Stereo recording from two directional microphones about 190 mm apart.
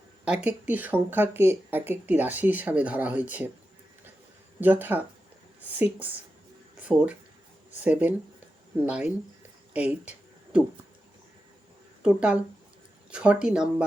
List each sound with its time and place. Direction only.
0.3 s speech: 5° right (ahead or behind)
4.6 s speech: 10° right (ahead or behind)
9.7 s a sound: 5° right (ahead or behind)
12.0 s speech: 5° right (ahead or behind)